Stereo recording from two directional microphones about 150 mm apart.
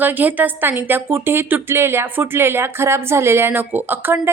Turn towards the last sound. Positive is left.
turn(degrees=-15)  # may be behind; listen again after turning